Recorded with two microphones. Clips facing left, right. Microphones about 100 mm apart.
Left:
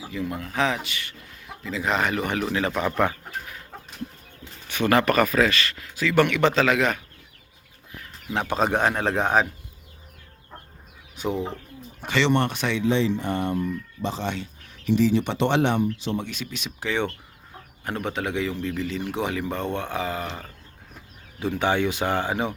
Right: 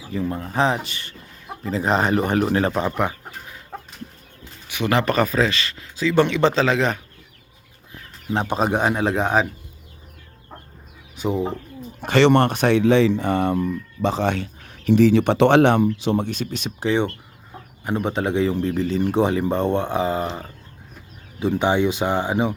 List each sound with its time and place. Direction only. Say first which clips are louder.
0.1 s speech: right 5 dB; 35° right (ahead or behind)
2.8 s chicken: even; 15° right (ahead or behind)
4.7 s speech: even; 20° right (ahead or behind)
8.3 s speech: right 3 dB; 30° right (ahead or behind)
8.5 s a man's voice: right 1 dB; 10° right (ahead or behind)
11.2 s speech: right 4 dB; 5° right (ahead or behind)
12.0 s speech: right 7 dB; 50° right (ahead or behind)
12.8 s speech: right 6 dB; 85° right
14.0 s speech: right 8 dB; 75° right (ahead or behind)
16.1 s speech: right 7 dB; 40° right (ahead or behind)
16.8 s speech: right 5 dB; 25° right (ahead or behind)